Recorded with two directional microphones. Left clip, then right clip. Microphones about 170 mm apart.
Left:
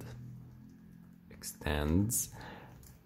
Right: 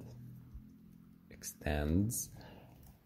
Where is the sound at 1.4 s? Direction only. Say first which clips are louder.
Left 2 dB; 10° right (ahead or behind).